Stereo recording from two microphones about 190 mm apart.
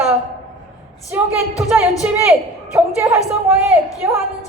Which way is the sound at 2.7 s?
15° right (ahead or behind).